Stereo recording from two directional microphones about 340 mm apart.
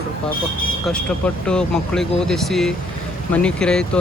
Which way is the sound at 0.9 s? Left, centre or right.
Centre.